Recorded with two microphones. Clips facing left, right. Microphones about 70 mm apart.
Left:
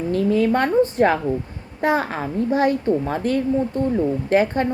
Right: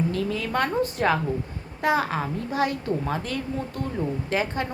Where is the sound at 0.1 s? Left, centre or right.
Left.